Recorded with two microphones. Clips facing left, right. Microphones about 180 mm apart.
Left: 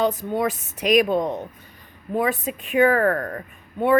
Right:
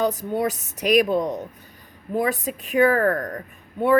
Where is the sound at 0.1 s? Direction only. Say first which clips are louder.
Even; 40° right (ahead or behind).